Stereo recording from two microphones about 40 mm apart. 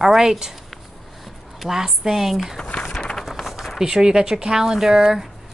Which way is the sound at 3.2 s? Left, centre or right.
Centre.